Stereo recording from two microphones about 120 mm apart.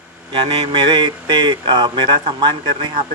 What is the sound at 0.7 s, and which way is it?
Speech, 40° right (ahead or behind).